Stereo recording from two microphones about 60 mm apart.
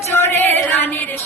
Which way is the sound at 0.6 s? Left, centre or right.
Left.